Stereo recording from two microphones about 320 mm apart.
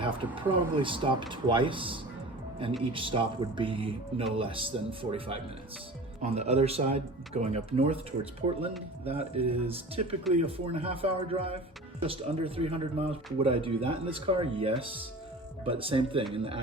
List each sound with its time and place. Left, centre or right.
0.0 s speech: centre